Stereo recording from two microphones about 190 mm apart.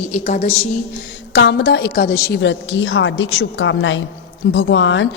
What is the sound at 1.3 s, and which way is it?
Speech, 65° left (ahead or behind).